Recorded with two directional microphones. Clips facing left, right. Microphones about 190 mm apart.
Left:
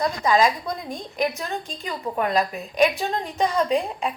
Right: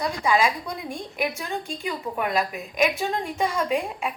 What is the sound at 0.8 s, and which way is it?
A woman's voice, 10° right (ahead or behind).